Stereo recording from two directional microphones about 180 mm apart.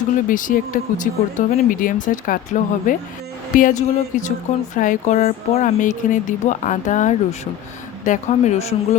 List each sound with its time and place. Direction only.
0.3 s speech: 50° left (ahead or behind)